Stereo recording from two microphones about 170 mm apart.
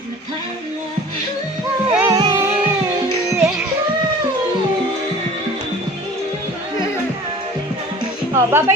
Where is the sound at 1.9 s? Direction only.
10° right (ahead or behind).